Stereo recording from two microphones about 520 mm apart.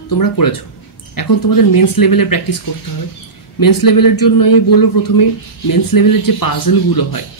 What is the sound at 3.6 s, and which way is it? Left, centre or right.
Speech, left.